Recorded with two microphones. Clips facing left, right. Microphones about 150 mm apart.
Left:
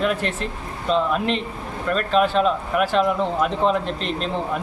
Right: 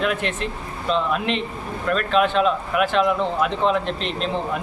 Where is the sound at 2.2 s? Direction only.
Centre (ahead or behind).